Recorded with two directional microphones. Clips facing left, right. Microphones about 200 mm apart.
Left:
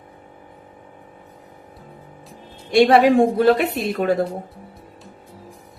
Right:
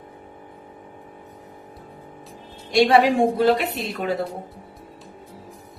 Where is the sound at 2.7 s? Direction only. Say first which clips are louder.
Left 3 dB; 55° left (ahead or behind).